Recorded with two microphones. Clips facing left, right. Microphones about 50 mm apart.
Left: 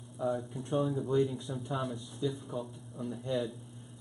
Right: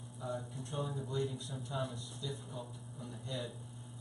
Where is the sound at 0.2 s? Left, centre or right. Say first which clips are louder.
Left 8 dB; left.